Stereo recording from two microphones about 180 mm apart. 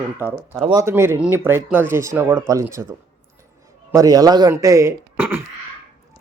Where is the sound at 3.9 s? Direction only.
20° right (ahead or behind).